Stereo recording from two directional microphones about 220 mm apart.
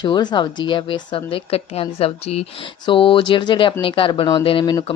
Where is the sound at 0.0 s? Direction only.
20° left (ahead or behind).